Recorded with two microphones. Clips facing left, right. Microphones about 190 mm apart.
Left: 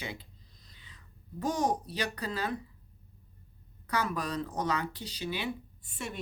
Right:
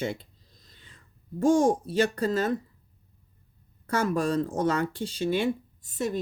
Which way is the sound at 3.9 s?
45° right (ahead or behind).